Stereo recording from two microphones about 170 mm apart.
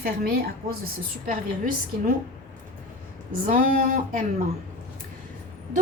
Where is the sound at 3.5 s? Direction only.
50° right (ahead or behind).